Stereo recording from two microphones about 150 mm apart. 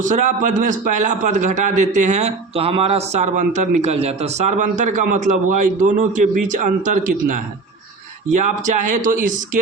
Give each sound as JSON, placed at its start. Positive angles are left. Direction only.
{"t": 0.0, "sound": "a man's voice", "side_deg": -55}